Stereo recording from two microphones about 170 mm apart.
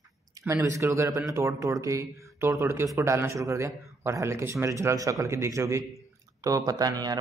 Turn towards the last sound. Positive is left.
turn(degrees=-20)  # may be behind; listen again after turning